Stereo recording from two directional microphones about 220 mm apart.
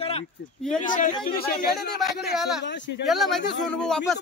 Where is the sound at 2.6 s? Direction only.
55° left (ahead or behind).